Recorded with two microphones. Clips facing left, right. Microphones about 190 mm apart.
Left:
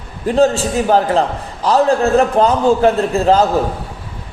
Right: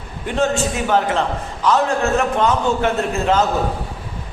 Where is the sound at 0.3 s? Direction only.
35° left (ahead or behind).